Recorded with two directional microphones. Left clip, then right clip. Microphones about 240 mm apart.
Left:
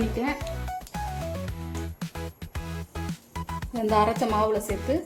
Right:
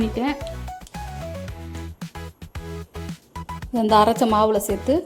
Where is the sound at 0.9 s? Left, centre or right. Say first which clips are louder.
Left 1 dB; centre.